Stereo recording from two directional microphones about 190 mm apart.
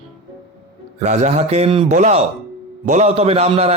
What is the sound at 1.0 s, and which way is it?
Speech, 35° right (ahead or behind).